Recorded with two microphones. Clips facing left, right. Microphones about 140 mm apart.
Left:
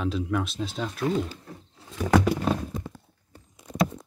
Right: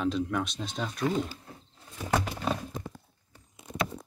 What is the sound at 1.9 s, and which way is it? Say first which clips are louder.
Wild animals: left 8 dB; 90° left.